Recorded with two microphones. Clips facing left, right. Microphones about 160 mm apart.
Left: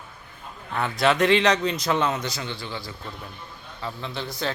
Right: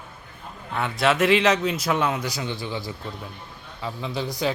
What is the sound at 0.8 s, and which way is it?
A man's voice, centre (ahead or behind).